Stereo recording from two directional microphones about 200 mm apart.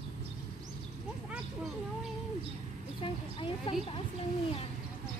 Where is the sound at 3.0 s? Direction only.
25° left (ahead or behind).